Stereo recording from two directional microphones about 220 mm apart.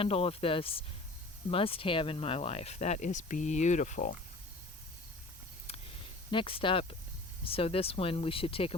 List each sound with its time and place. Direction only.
0.0 s speech: 25° left (ahead or behind)
6.3 s speech: 25° left (ahead or behind)